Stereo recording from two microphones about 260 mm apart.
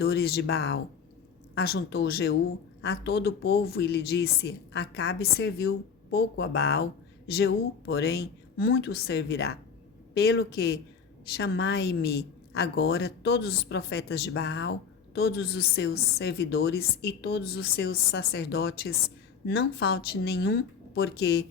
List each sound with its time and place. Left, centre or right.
0.0 s a woman's voice: left